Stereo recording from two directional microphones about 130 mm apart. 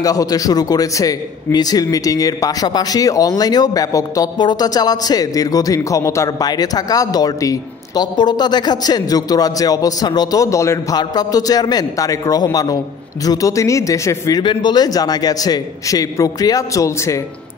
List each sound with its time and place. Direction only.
0.0 s a man's voice: 25° left (ahead or behind)
14.4 s a man's voice: 35° left (ahead or behind)